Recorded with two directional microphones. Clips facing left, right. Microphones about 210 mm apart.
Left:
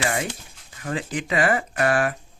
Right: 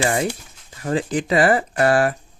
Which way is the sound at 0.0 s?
35° right (ahead or behind).